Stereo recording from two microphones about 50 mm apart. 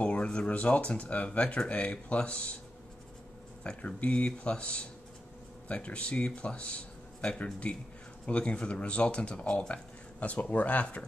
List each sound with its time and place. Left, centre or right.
0.0 s speech: left
3.8 s speech: left